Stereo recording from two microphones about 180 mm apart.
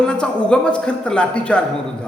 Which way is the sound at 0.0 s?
5° left (ahead or behind).